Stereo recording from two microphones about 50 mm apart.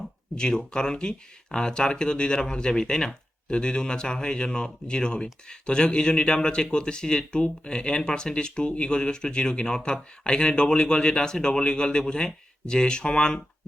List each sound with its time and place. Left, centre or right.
0.3 s speech: centre